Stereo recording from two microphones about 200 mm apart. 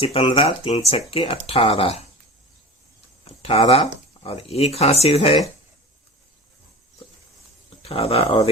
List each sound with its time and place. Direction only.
0.0 s speech: 30° left (ahead or behind)
3.2 s speech: 30° left (ahead or behind)
7.8 s speech: 30° left (ahead or behind)